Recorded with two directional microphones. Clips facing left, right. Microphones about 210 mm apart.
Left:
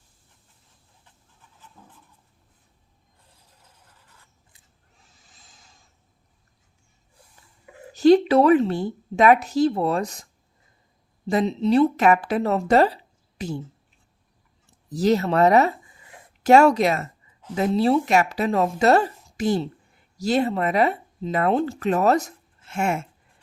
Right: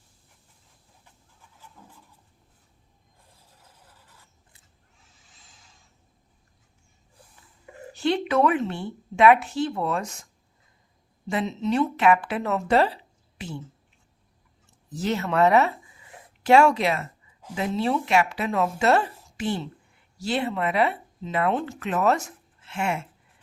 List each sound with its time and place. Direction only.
5.2 s a sound: 40° left (ahead or behind)
7.9 s speech: 40° left (ahead or behind)
11.3 s speech: 35° left (ahead or behind)
14.8 s speech: 40° left (ahead or behind)